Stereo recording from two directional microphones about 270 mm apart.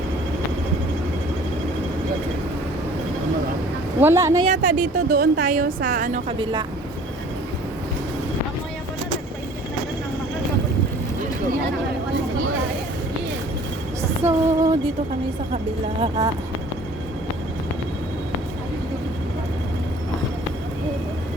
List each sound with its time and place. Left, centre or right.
4.0 s speech: centre
4.4 s a woman's voice: right
14.0 s music: centre
15.5 s speech: centre